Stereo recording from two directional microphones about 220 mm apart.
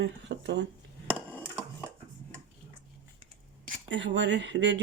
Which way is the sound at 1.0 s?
5° left (ahead or behind).